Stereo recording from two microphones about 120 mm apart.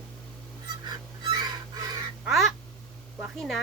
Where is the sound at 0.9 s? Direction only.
35° right (ahead or behind).